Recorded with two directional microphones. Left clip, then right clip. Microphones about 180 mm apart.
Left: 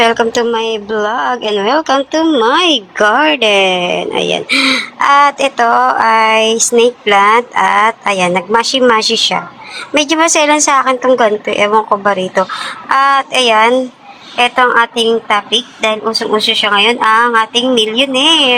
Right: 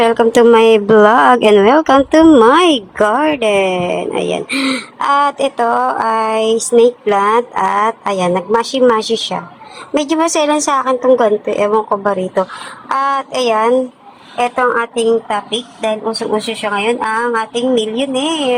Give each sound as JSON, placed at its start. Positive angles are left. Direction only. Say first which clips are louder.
{"t": 0.0, "sound": "speech", "louder": "left 1 dB", "side_deg": -20}
{"t": 0.3, "sound": "speech", "louder": "right 6 dB", "side_deg": -30}
{"t": 7.5, "sound": "a woman's voice", "louder": "left 4 dB", "side_deg": 0}
{"t": 7.8, "sound": "a woman's voice", "louder": "left 4 dB", "side_deg": -15}